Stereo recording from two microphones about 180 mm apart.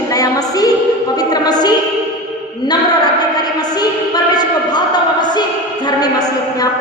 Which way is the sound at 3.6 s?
20° left (ahead or behind).